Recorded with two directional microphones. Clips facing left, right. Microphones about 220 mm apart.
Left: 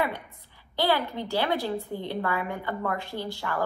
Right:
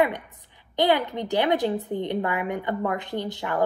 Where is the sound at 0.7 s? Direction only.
20° right (ahead or behind).